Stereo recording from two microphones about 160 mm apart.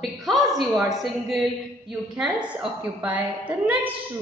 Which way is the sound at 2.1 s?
5° right (ahead or behind).